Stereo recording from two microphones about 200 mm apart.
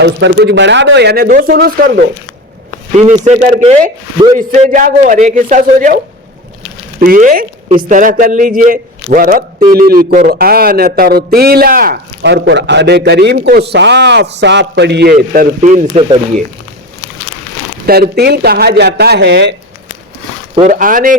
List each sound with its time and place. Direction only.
0.0 s speech: 60° right (ahead or behind)
3.0 s a man's voice: 35° right (ahead or behind)
4.4 s a man's voice: 40° right (ahead or behind)
7.0 s a man's voice: 45° right (ahead or behind)
17.8 s a man's voice: 50° right (ahead or behind)
20.6 s a man's voice: 40° right (ahead or behind)